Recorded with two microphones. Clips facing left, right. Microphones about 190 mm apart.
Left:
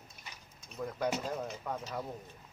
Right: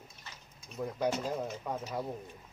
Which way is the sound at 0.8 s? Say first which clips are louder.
Right 2 dB; 15° right (ahead or behind).